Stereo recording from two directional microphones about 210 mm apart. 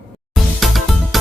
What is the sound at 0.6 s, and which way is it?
Music, centre (ahead or behind).